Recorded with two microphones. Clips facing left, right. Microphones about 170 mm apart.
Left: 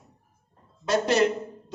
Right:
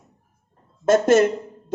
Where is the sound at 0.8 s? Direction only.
50° right (ahead or behind).